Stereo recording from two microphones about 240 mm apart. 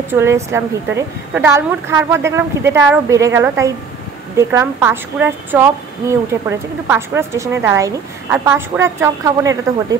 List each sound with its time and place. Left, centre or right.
0.1 s a woman's voice: centre